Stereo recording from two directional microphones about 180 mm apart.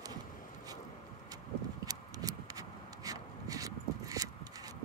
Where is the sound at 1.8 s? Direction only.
20° right (ahead or behind).